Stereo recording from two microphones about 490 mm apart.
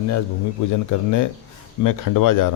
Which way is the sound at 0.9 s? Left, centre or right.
Left.